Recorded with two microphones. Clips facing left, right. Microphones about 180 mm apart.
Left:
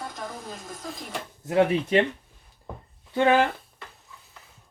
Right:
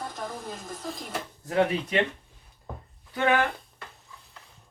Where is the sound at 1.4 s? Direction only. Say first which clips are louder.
Left 3 dB; 25° left (ahead or behind).